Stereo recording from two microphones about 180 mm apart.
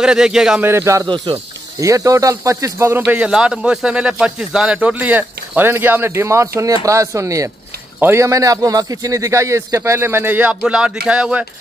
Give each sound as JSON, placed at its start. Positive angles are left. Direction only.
{"t": 0.0, "sound": "speech", "side_deg": -5}
{"t": 0.7, "sound": "speech", "side_deg": -15}
{"t": 1.0, "sound": "speech", "side_deg": -25}